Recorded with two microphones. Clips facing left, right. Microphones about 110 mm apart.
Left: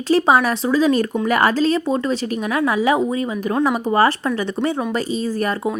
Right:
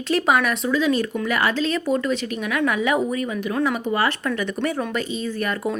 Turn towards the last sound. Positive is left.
turn(degrees=35)  # may be behind; listen again after turning